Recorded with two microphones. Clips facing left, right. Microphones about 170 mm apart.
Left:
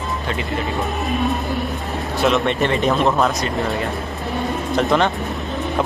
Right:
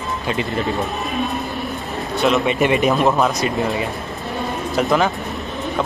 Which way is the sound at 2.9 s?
Centre (ahead or behind).